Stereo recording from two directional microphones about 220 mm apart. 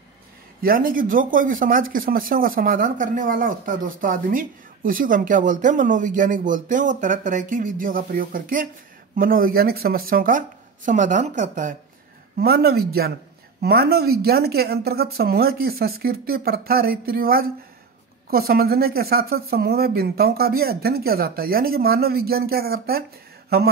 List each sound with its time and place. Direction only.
0.6 s speech: 40° right (ahead or behind)
12.4 s speech: 45° right (ahead or behind)